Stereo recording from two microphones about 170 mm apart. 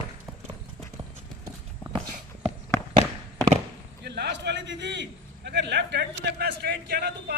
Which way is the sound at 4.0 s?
80° right.